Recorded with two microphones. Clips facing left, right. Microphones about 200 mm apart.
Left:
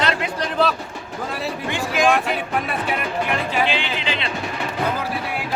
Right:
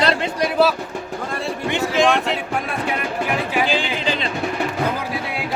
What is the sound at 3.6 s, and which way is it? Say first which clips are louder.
Speech: right 3 dB; 45° right (ahead or behind).